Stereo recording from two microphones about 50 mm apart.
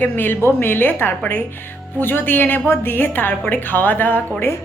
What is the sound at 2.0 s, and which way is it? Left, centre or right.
A woman's voice, left.